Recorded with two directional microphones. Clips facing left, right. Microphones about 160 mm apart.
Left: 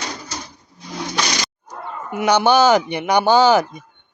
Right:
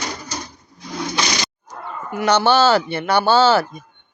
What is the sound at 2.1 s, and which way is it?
A man's voice, 15° left (ahead or behind).